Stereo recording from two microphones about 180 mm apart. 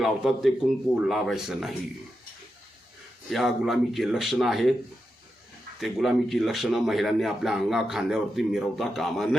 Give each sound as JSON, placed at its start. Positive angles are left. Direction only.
{"t": 0.0, "sound": "speech", "side_deg": 0}
{"t": 3.2, "sound": "speech", "side_deg": 0}
{"t": 5.8, "sound": "speech", "side_deg": 0}